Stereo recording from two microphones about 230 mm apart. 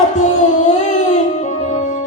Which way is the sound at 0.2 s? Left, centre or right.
Left.